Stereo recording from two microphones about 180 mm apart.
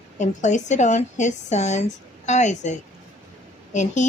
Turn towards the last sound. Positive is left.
turn(degrees=40)  # may be behind; listen again after turning